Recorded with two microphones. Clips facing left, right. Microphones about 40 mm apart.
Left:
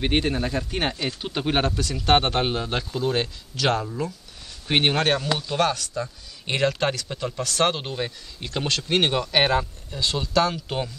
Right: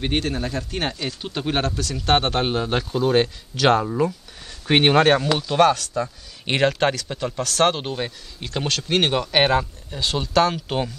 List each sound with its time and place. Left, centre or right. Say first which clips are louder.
0.0 s speech: left 1 dB; centre; by 5.2 s right
5.5 s speech: right 8 dB; centre
6.4 s speech: right 3 dB; right
7.1 s speech: right 2 dB; centre
7.7 s speech: right 2 dB; centre